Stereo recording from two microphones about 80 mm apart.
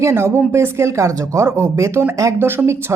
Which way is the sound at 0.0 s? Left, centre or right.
Right.